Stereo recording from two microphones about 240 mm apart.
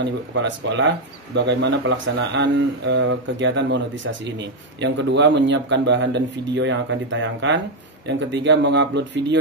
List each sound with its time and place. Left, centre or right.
0.0 s speech: right